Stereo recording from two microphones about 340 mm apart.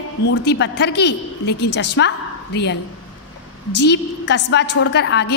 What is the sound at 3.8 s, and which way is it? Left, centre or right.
A woman's voice, left.